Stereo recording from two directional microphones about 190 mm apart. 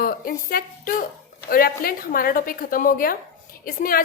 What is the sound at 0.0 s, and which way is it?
A woman's voice, 50° left (ahead or behind).